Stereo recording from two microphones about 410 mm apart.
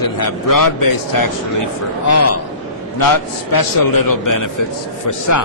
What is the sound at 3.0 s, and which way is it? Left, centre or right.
A man's voice, left.